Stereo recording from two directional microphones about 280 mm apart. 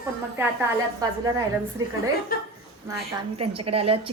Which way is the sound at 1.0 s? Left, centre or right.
Centre.